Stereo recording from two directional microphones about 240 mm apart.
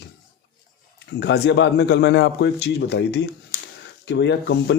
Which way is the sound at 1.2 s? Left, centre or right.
Left.